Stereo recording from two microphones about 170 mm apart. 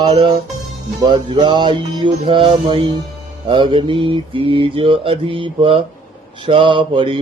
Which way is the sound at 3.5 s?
30° right (ahead or behind).